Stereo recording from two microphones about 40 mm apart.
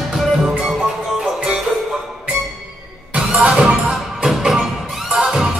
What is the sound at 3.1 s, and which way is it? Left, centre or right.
Music, right.